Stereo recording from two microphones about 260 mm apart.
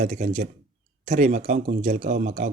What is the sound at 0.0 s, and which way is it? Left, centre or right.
Speech, right.